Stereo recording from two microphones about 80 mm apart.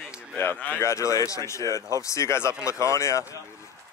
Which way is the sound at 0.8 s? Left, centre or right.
Left.